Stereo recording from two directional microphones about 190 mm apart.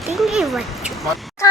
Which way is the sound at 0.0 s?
Centre (ahead or behind).